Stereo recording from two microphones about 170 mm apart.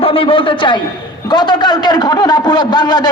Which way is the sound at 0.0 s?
30° left (ahead or behind).